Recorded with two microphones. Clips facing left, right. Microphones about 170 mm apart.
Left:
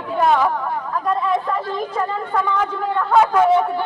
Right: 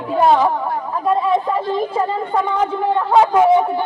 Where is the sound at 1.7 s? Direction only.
25° right (ahead or behind).